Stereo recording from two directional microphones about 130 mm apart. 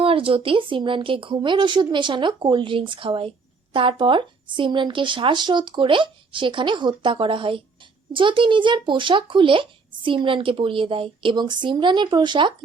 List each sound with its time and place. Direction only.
0.0 s speech: 45° right (ahead or behind)